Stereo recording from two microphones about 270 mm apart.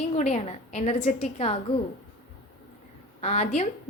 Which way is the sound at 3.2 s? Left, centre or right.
Left.